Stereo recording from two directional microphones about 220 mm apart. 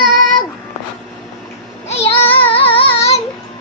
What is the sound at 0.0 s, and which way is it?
Child singing, 40° right (ahead or behind).